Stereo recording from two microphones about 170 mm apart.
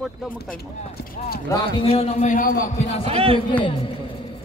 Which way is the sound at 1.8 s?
35° left (ahead or behind).